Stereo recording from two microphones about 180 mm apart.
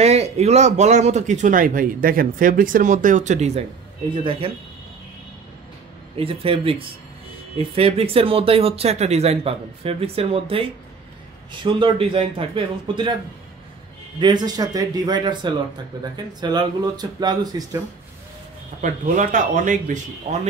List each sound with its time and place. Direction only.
0.0 s speech: 35° right (ahead or behind)
6.1 s speech: 30° right (ahead or behind)
11.6 s speech: 30° right (ahead or behind)
14.2 s speech: 25° right (ahead or behind)
18.8 s speech: 45° right (ahead or behind)